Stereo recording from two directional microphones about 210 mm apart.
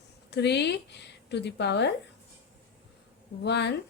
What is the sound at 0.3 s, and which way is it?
A woman's voice, 55° left (ahead or behind).